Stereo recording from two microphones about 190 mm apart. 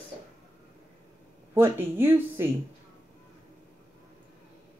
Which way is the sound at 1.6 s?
10° right (ahead or behind).